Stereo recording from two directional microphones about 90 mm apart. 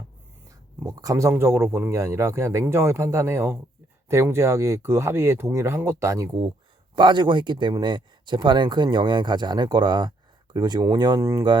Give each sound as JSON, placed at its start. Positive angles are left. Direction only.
{"t": 0.9, "sound": "speech", "side_deg": -40}
{"t": 6.9, "sound": "speech", "side_deg": -60}
{"t": 11.2, "sound": "speech", "side_deg": -35}